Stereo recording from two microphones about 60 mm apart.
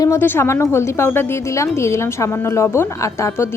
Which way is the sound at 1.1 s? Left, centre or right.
Left.